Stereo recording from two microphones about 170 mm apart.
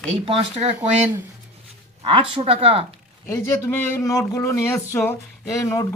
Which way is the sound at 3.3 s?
15° left (ahead or behind).